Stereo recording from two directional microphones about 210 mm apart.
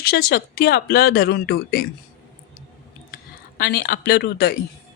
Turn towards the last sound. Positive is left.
turn(degrees=45)  # may be behind; listen again after turning